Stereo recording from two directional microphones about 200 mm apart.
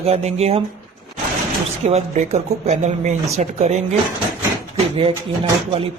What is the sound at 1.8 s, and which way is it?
Speech, 35° right (ahead or behind).